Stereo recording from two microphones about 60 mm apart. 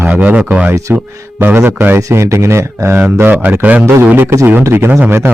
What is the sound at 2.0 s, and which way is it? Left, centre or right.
Speech, right.